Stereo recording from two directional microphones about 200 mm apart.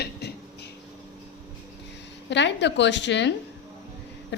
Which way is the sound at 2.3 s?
60° left (ahead or behind).